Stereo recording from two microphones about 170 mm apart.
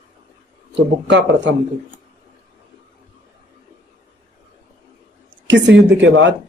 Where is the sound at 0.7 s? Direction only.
90° right.